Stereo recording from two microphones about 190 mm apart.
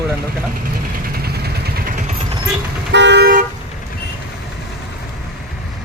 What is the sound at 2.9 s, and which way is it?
Toot, 65° right (ahead or behind).